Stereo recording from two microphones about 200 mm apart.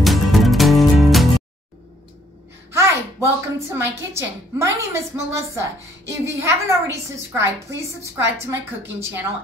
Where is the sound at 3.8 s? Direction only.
15° right (ahead or behind).